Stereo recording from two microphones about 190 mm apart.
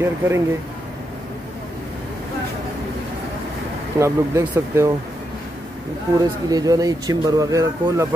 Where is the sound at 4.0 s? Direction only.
15° right (ahead or behind).